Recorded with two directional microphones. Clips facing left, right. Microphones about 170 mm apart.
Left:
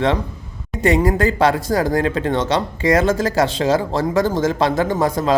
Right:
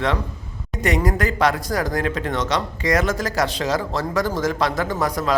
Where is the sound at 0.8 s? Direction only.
25° left (ahead or behind).